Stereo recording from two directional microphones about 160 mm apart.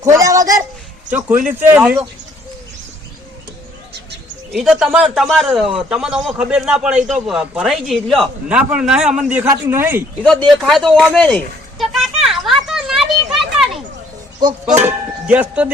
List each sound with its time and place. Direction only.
0.0 s a sound: 20° right (ahead or behind)
1.6 s speech: 10° right (ahead or behind)
4.5 s a man's voice: 5° right (ahead or behind)
9.5 s speech: 15° right (ahead or behind)
10.5 s a sound: centre (ahead or behind)
14.6 s speech: 15° right (ahead or behind)